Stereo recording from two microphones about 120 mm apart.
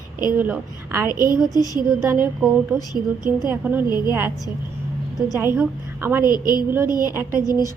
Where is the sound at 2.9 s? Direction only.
35° left (ahead or behind).